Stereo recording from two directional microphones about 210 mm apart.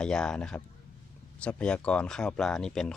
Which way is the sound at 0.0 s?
5° left (ahead or behind).